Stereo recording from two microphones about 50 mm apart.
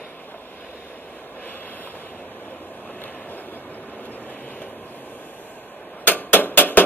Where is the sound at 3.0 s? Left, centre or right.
Left.